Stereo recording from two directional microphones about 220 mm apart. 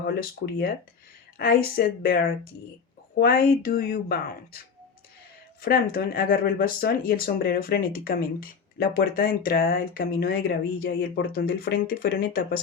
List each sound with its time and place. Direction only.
0.0 s speech: 45° left (ahead or behind)
3.2 s speech: 40° left (ahead or behind)
5.6 s speech: 45° left (ahead or behind)